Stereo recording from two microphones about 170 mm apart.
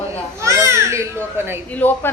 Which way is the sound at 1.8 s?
10° left (ahead or behind).